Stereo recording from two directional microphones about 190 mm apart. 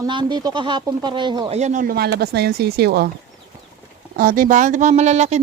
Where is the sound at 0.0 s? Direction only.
25° right (ahead or behind); by 3.1 s 55° right (ahead or behind).